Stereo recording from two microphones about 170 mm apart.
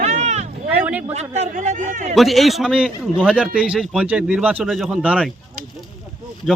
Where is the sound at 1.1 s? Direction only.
40° right (ahead or behind).